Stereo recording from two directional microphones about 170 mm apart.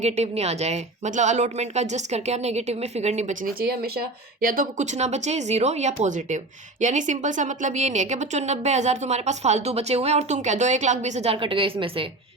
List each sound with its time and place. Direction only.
0.0 s speech: 40° right (ahead or behind)
3.6 s speech: 60° right (ahead or behind); by 12.0 s 30° right (ahead or behind)